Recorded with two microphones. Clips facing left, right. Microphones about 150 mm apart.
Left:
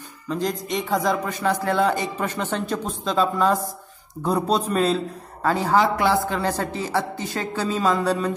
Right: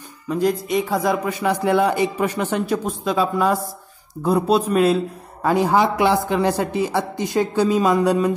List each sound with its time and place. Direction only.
0.3 s a man's voice: 10° right (ahead or behind)